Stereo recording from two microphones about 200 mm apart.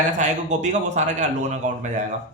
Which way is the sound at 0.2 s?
35° right (ahead or behind).